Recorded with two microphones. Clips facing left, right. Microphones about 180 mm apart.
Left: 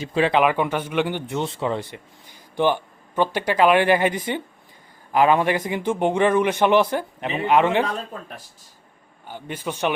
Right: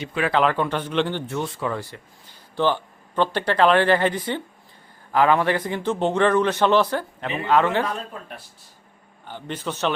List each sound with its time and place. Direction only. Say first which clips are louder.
0.1 s speech: left 5 dB; 25° left (ahead or behind)
0.3 s a man's voice: right 2 dB; 15° left (ahead or behind)
1.4 s a man's voice: left 4 dB; 25° left (ahead or behind)
9.2 s a man's voice: even; 10° left (ahead or behind)